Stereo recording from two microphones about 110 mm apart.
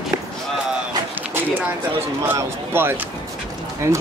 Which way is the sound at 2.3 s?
20° right (ahead or behind).